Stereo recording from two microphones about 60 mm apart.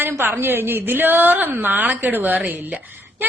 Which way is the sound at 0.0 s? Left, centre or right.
Right.